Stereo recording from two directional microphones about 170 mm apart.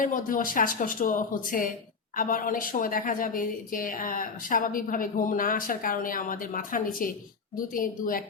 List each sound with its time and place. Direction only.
0.0 s a woman's voice: 55° left (ahead or behind)